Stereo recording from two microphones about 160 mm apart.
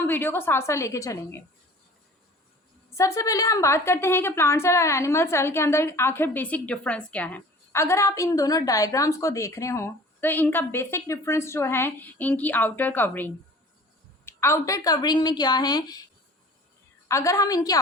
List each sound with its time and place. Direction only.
0.0 s a woman's voice: 15° left (ahead or behind)
2.9 s a woman's voice: 20° left (ahead or behind)
17.1 s a woman's voice: 20° left (ahead or behind)